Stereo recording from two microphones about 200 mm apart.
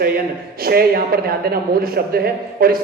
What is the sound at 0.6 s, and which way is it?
A man's voice, 50° right (ahead or behind).